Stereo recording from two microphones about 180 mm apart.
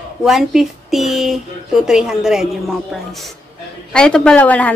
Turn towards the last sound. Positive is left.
turn(degrees=10)  # may be behind; listen again after turning